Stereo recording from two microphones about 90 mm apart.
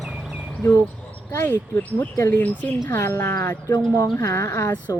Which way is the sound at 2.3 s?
20° left (ahead or behind).